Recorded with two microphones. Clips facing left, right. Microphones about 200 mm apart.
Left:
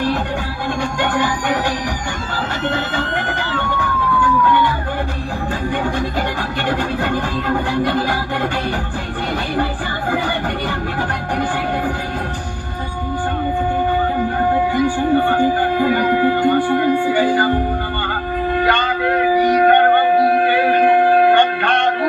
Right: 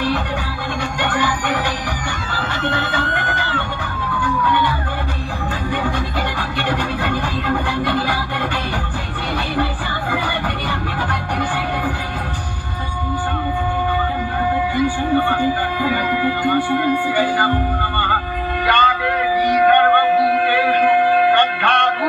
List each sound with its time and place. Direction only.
0.9 s music: 45° left (ahead or behind)
6.7 s music: 45° left (ahead or behind)
14.4 s music: 45° left (ahead or behind)